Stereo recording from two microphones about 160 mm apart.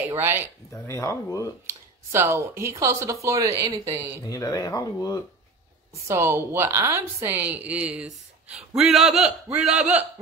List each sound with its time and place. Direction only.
0.2 s a woman's voice: 15° right (ahead or behind)
0.7 s speech: 15° left (ahead or behind)
1.7 s speech: 15° right (ahead or behind)
4.3 s speech: 20° left (ahead or behind)
6.0 s a woman's voice: 15° right (ahead or behind)